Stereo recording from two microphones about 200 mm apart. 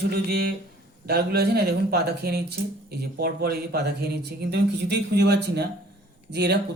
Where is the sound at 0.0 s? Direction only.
50° right (ahead or behind).